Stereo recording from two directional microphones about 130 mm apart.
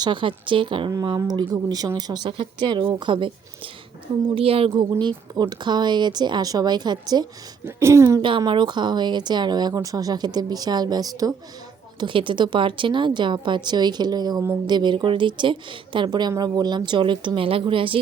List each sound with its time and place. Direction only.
0.0 s speech: 40° right (ahead or behind)
4.4 s a woman's voice: 45° right (ahead or behind)
4.7 s speech: 35° right (ahead or behind)
7.6 s speech: 20° right (ahead or behind)
8.2 s speech: 40° right (ahead or behind)
11.9 s speech: 40° right (ahead or behind)